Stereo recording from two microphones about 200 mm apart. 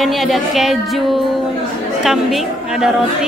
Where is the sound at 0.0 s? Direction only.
Centre (ahead or behind).